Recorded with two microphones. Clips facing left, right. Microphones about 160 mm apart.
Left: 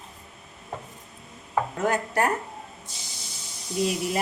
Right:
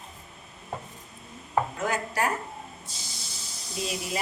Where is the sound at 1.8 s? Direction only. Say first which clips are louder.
Left 4 dB; 55° left (ahead or behind).